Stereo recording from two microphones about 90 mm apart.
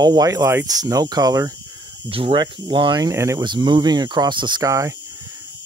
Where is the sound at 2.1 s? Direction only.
80° right.